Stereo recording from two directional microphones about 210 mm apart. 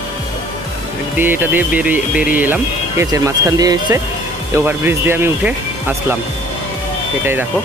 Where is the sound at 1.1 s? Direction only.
10° right (ahead or behind).